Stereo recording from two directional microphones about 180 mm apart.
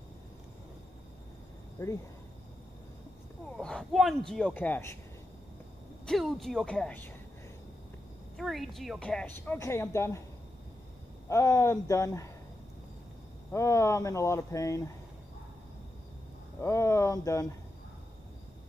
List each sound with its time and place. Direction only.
1.8 s a woman's voice: 15° left (ahead or behind)
3.5 s speech: centre (ahead or behind)
6.0 s speech: centre (ahead or behind)
8.4 s a woman's voice: centre (ahead or behind)
11.2 s a woman's voice: 15° left (ahead or behind)
13.5 s a woman's voice: 15° left (ahead or behind)
16.6 s a woman's voice: 15° left (ahead or behind)